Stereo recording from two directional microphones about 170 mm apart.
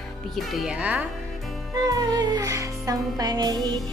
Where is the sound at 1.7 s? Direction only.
20° right (ahead or behind).